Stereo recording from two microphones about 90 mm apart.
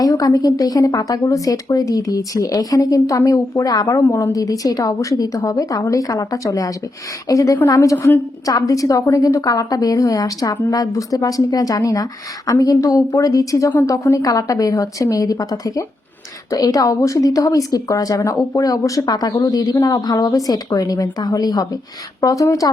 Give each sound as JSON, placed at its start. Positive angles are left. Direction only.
{"t": 0.0, "sound": "a woman's voice", "side_deg": 45}